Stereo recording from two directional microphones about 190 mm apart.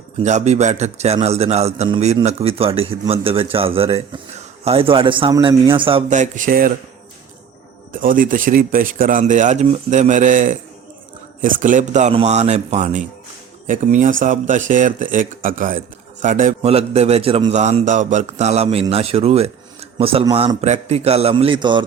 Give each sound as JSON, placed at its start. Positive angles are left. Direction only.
{"t": 0.2, "sound": "a man's voice", "side_deg": -40}
{"t": 6.1, "sound": "speech", "side_deg": -40}
{"t": 7.9, "sound": "a man's voice", "side_deg": -45}
{"t": 16.6, "sound": "a man's voice", "side_deg": -35}